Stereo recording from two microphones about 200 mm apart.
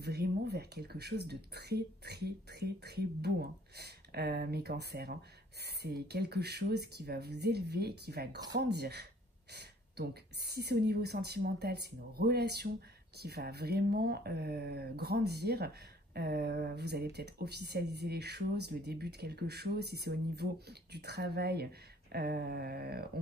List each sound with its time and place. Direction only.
0.0 s speech: 55° right (ahead or behind)